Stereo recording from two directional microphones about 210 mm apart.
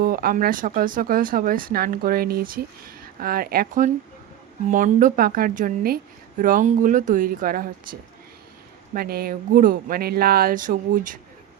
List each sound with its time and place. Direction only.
0.0 s speech: 45° right (ahead or behind)